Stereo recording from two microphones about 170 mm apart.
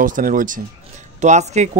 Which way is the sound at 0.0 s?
50° right (ahead or behind).